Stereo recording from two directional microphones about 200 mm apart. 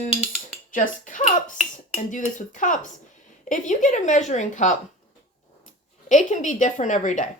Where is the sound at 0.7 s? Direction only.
40° left (ahead or behind).